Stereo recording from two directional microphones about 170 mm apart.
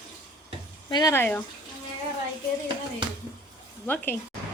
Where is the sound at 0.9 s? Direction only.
25° left (ahead or behind).